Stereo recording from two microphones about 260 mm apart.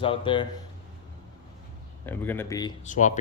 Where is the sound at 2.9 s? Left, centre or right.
Left.